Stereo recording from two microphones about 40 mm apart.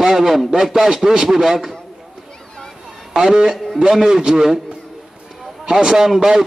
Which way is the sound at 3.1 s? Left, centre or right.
Centre.